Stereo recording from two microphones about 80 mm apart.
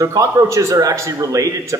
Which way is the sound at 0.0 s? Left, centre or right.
Right.